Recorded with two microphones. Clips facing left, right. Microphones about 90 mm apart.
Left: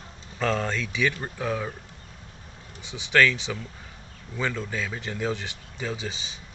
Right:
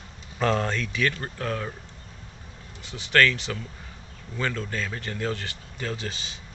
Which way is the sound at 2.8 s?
15° left (ahead or behind).